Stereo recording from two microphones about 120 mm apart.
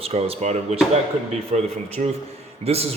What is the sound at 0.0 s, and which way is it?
A man's voice, 60° right (ahead or behind).